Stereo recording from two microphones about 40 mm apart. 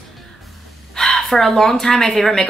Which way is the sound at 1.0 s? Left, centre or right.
Centre.